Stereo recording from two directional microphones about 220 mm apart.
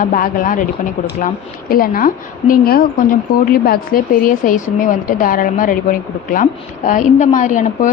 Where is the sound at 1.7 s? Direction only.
40° left (ahead or behind).